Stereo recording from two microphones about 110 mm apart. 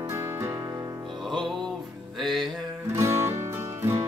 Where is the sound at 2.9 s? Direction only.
25° right (ahead or behind).